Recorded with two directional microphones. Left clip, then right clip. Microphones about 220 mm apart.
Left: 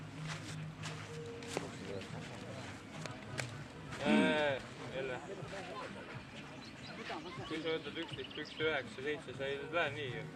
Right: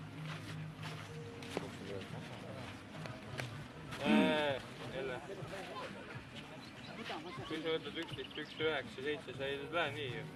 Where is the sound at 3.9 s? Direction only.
30° right (ahead or behind).